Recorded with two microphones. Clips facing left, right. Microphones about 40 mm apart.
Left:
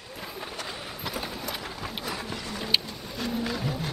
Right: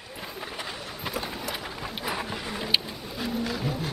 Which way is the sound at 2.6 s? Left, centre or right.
Centre.